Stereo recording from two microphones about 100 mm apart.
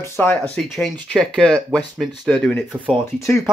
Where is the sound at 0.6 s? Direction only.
Centre (ahead or behind).